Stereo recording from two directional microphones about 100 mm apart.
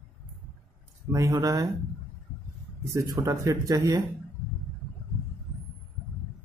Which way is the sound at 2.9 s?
30° right (ahead or behind).